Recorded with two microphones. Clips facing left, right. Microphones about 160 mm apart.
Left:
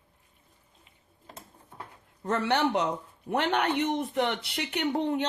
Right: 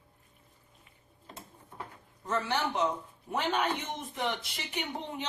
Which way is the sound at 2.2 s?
65° left (ahead or behind).